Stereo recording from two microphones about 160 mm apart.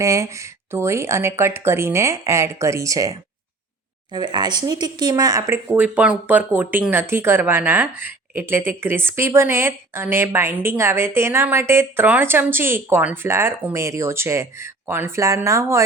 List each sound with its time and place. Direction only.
0.0 s speech: 20° right (ahead or behind)
4.1 s speech: 25° right (ahead or behind)